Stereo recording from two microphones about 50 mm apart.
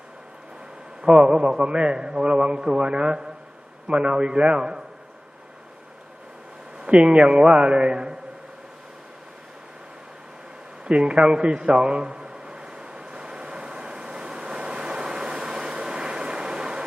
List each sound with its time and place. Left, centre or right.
1.0 s a man's voice: centre
6.7 s a man's voice: centre
10.8 s a sound: right